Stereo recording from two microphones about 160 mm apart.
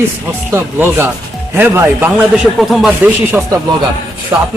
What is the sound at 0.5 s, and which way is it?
Speech, 15° right (ahead or behind).